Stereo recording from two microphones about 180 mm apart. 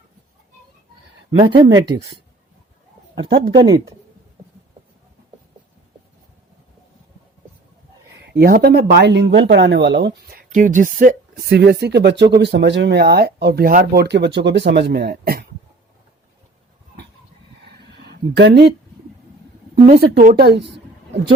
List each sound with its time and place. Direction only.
1.4 s speech: 25° right (ahead or behind)
3.2 s speech: 70° right (ahead or behind)
3.6 s speech: 25° right (ahead or behind)
8.4 s speech: 60° right (ahead or behind)
18.0 s speech: 65° right (ahead or behind)
19.8 s speech: 55° right (ahead or behind); by 20.7 s 70° right (ahead or behind)